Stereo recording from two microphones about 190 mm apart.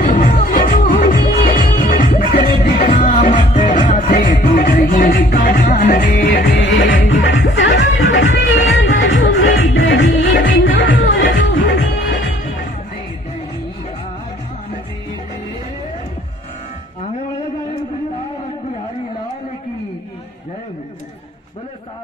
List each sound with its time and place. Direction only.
0.0 s music: 40° left (ahead or behind)
6.2 s music: 60° left (ahead or behind)
11.0 s music: 85° left